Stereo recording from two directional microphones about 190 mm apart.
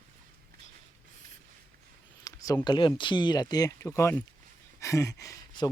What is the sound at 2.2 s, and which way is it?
Speech, 20° left (ahead or behind).